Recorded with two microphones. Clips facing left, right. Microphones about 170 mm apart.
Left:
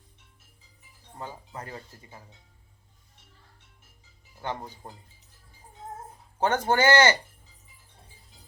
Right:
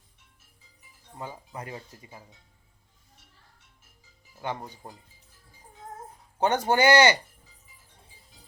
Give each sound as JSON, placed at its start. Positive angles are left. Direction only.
{"t": 1.2, "sound": "speech", "side_deg": -15}
{"t": 4.4, "sound": "speech", "side_deg": -5}
{"t": 6.4, "sound": "speech", "side_deg": -15}